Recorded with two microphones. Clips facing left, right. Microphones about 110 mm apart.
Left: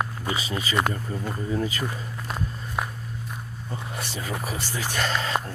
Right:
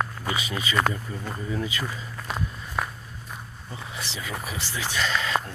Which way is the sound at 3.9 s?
50° left (ahead or behind).